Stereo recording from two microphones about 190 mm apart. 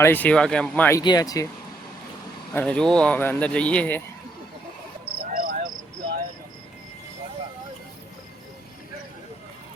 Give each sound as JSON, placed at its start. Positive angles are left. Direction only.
{"t": 0.0, "sound": "speech", "side_deg": 10}
{"t": 2.5, "sound": "speech", "side_deg": 10}
{"t": 5.3, "sound": "cricket", "side_deg": -50}